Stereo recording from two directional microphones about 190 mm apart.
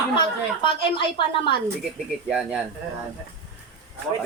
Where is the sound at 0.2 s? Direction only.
25° left (ahead or behind).